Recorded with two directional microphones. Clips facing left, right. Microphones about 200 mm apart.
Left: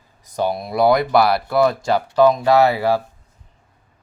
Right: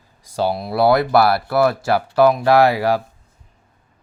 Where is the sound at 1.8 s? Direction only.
5° right (ahead or behind).